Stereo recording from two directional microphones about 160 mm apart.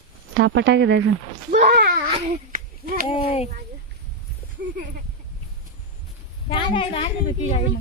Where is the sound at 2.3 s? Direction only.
60° right (ahead or behind).